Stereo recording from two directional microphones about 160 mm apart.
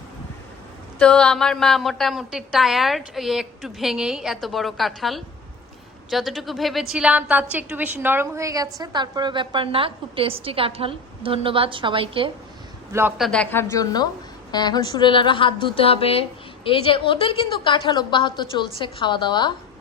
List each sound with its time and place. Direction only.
0.9 s a woman's voice: 5° left (ahead or behind); by 12.3 s 35° right (ahead or behind)
12.9 s a man's voice: 15° right (ahead or behind)
13.1 s a woman's voice: 5° left (ahead or behind); by 19.5 s 30° left (ahead or behind)